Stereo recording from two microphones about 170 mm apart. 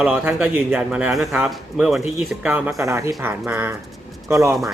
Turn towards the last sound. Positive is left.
turn(degrees=-20)  # may be behind; listen again after turning